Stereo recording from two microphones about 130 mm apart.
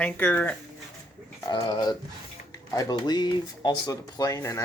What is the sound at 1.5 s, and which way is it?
Speech, 35° left (ahead or behind).